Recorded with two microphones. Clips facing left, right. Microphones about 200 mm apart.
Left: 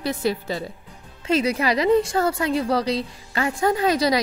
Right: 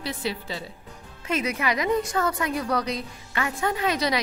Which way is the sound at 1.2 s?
30° left (ahead or behind).